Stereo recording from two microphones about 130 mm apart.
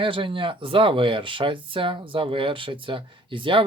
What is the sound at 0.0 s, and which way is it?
Speech, 40° right (ahead or behind).